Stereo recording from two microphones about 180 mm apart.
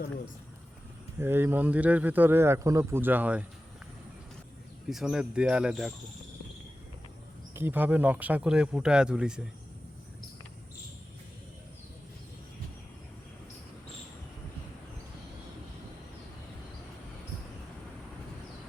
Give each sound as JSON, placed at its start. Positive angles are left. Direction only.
{"t": 1.2, "sound": "speech", "side_deg": -10}
{"t": 4.9, "sound": "speech", "side_deg": 0}
{"t": 7.5, "sound": "speech", "side_deg": -10}